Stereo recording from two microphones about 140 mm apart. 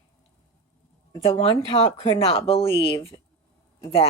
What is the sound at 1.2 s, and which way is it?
Speech, 40° left (ahead or behind).